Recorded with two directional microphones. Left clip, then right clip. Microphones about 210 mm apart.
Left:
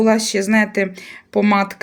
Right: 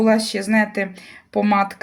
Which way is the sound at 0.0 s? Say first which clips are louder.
Left 2 dB; 25° left (ahead or behind).